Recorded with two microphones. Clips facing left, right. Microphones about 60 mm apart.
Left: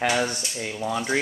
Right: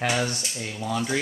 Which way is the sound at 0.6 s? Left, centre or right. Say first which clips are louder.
Left 1 dB; centre.